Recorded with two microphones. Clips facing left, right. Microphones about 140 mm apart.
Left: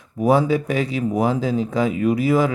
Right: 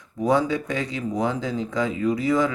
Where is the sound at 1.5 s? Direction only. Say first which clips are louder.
Left 5 dB; 20° left (ahead or behind).